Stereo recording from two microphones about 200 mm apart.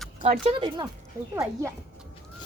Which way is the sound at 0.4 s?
25° right (ahead or behind).